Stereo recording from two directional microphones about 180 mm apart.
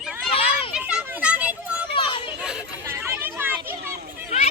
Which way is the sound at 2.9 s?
10° right (ahead or behind).